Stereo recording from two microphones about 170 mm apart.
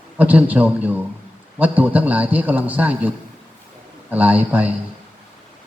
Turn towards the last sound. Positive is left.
turn(degrees=-10)  # may be behind; listen again after turning